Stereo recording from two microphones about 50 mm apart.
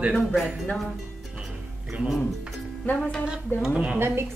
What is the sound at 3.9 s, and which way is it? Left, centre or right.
Speech, right.